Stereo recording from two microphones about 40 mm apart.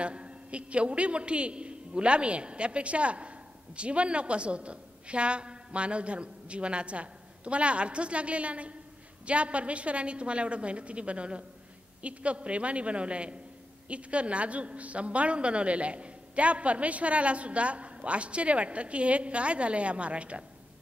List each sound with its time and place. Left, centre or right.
0.0 s a woman's voice: right